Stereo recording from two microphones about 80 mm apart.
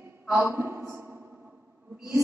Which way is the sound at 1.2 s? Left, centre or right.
Centre.